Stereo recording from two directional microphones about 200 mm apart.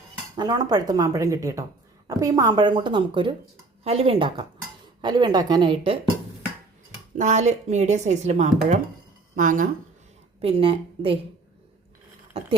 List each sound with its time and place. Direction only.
0.3 s speech: 20° right (ahead or behind)
7.2 s speech: 35° right (ahead or behind)
10.4 s speech: 25° right (ahead or behind)